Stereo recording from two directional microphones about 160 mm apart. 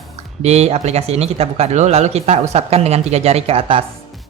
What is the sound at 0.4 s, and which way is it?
Speech, 40° right (ahead or behind).